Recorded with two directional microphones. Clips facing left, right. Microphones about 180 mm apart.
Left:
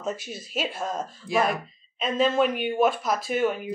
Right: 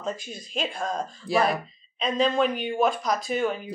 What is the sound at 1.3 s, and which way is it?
Speech, 35° right (ahead or behind).